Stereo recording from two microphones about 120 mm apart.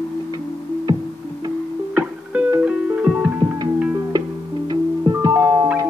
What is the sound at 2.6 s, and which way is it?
Music, 10° right (ahead or behind).